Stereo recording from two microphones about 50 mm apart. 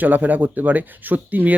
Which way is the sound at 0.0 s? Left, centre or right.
Right.